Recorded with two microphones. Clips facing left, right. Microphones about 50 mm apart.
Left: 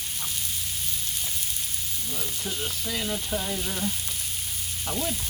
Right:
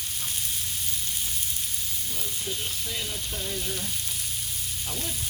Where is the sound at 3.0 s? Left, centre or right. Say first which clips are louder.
Left 5 dB; left.